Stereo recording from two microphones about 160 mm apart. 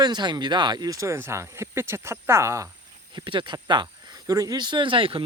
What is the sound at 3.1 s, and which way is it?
Speech, 30° right (ahead or behind).